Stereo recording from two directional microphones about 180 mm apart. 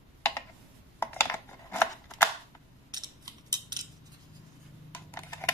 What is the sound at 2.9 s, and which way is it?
Scissors, 20° right (ahead or behind).